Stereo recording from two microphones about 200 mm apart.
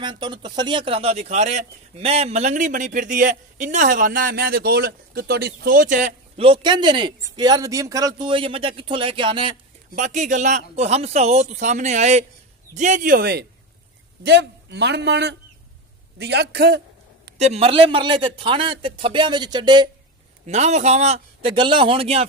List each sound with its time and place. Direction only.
0.0 s a man's voice: 25° right (ahead or behind)
9.9 s a man's voice: 35° right (ahead or behind); by 16.8 s 55° right (ahead or behind)
17.4 s a man's voice: 30° right (ahead or behind)
20.4 s speech: 35° right (ahead or behind)